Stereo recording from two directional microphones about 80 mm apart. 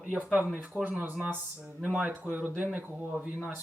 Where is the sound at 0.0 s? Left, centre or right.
Centre.